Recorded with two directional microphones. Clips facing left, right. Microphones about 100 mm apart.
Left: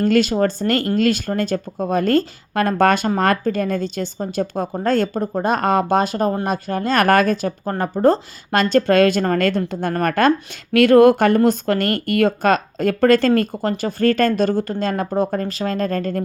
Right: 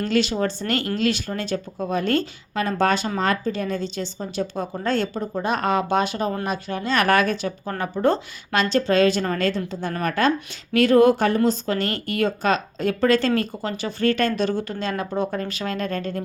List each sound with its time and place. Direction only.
0.0 s speech: 45° left (ahead or behind)